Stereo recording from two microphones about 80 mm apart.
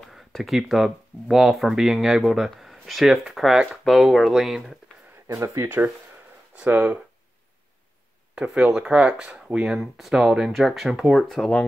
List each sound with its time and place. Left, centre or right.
0.0 s speech: centre
5.3 s speech: right
6.5 s speech: centre
8.4 s speech: centre
11.2 s speech: centre